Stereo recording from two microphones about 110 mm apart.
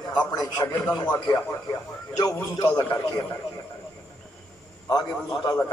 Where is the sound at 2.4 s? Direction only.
20° left (ahead or behind).